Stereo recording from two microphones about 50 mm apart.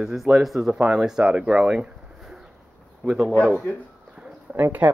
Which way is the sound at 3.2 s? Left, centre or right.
Right.